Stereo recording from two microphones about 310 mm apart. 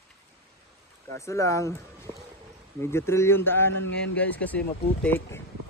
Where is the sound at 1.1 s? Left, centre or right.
Centre.